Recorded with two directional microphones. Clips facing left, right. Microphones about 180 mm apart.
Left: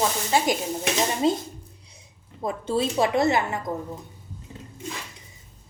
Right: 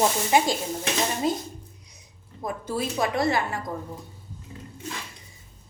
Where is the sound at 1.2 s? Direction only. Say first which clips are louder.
Left 3 dB; 25° left (ahead or behind).